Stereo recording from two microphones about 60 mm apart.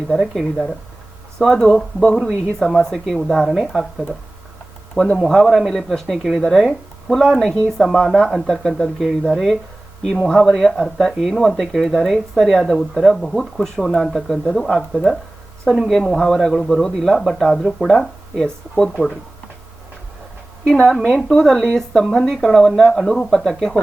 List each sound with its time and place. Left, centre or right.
0.1 s a man's voice: centre
5.1 s a man's voice: centre
10.2 s a man's voice: centre
10.5 s a man's voice: centre
20.7 s speech: centre